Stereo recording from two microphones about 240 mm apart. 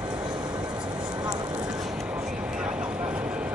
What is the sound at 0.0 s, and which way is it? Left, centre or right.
Vehicle, centre.